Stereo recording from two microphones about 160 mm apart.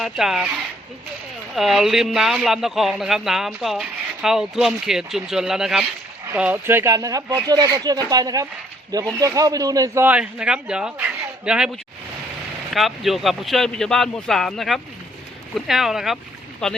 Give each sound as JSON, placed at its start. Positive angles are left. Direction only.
{"t": 0.0, "sound": "speech", "side_deg": 0}
{"t": 1.5, "sound": "speech", "side_deg": 0}
{"t": 12.7, "sound": "speech", "side_deg": 0}